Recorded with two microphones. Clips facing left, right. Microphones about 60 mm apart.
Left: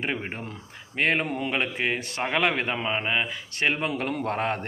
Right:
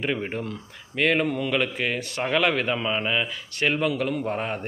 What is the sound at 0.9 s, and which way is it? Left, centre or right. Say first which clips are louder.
Speech: right 2 dB; left.